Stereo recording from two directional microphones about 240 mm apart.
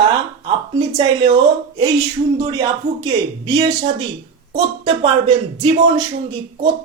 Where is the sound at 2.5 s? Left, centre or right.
Centre.